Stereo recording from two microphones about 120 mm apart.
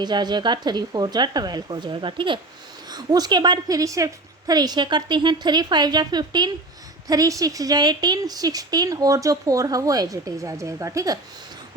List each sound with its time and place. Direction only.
0.0 s a woman's voice: 35° right (ahead or behind)